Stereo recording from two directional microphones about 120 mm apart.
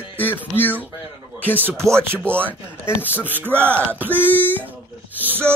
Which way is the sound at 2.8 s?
15° left (ahead or behind).